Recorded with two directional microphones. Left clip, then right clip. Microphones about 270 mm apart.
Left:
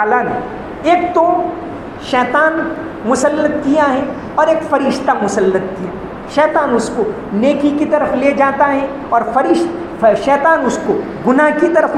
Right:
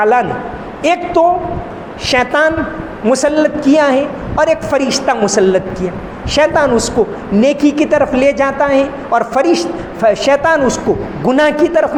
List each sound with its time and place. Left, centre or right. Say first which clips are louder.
0.0 s a woman's voice: right 2 dB; right